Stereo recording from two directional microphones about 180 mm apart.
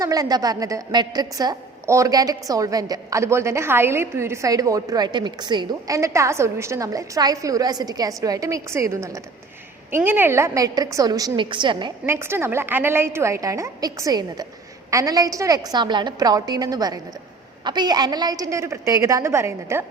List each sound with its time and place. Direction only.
0.0 s a woman's voice: 20° right (ahead or behind)
12.0 s a woman's voice: 15° right (ahead or behind)